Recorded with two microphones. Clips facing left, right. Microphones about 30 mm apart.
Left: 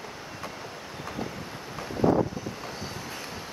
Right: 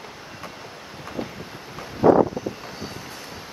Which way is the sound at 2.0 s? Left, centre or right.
Right.